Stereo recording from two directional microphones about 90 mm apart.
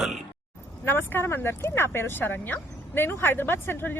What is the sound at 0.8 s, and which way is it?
Speech, 25° left (ahead or behind).